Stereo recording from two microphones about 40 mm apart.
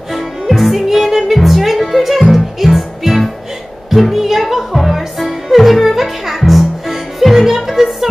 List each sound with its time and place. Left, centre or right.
0.1 s music: centre